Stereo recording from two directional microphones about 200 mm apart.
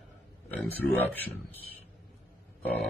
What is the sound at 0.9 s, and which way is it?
Speech, 10° left (ahead or behind).